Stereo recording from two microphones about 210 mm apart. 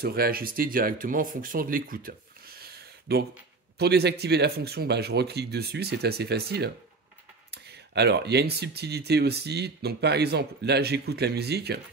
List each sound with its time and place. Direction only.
0.0 s speech: 45° right (ahead or behind)